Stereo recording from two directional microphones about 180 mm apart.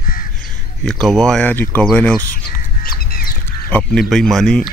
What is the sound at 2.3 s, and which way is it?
Music, 55° left (ahead or behind).